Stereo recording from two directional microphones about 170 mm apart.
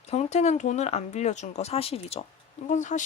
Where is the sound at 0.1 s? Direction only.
40° left (ahead or behind).